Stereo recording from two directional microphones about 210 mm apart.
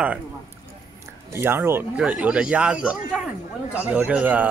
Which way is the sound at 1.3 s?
10° right (ahead or behind).